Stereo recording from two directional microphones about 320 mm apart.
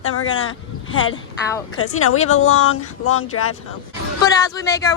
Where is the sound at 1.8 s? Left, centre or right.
Left.